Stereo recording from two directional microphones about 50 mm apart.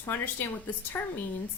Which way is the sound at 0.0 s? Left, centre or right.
Left.